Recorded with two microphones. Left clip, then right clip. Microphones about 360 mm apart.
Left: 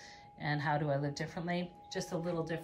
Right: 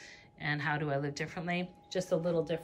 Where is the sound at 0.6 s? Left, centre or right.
Centre.